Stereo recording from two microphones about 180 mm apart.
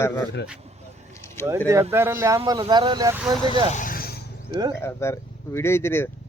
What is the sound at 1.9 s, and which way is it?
Speech, 15° right (ahead or behind).